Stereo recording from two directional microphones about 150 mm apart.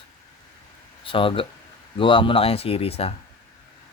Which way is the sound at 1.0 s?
35° left (ahead or behind).